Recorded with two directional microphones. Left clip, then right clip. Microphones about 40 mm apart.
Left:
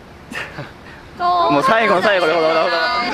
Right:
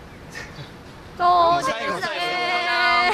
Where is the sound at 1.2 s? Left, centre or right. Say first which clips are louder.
Left 1 dB; centre.